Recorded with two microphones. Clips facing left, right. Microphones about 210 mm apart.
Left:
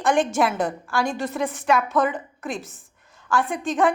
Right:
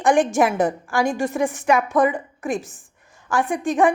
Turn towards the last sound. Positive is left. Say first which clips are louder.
# right 3 dB
turn(degrees=-15)  # may be behind; listen again after turning